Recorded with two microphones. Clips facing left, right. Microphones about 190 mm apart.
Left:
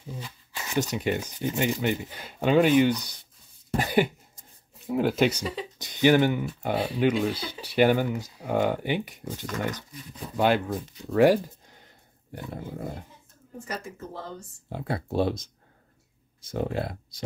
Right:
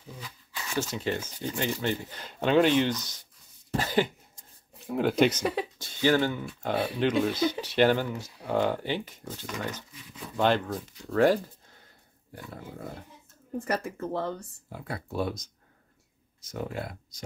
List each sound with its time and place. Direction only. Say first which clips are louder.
0.1 s shuffling cards: left 4 dB; 20° left (ahead or behind)
0.9 s speech: left 3 dB; 15° left (ahead or behind)
4.8 s speech: even; centre (ahead or behind)
5.8 s speech: left 5 dB; 15° left (ahead or behind)
13.7 s speech: right 5 dB; 60° right (ahead or behind)
14.7 s speech: left 6 dB; 30° left (ahead or behind)